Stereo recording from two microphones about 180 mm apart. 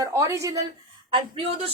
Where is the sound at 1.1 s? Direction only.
30° right (ahead or behind).